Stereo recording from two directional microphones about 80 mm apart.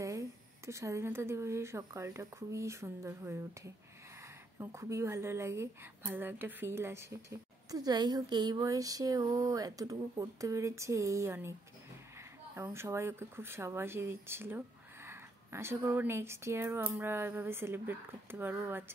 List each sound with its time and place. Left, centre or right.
0.0 s a woman's voice: right
6.0 s speech: right
7.7 s a woman's voice: right
8.5 s speech: right
12.7 s a woman's voice: right